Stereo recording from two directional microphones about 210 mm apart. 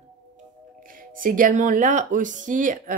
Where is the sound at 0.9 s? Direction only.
40° right (ahead or behind).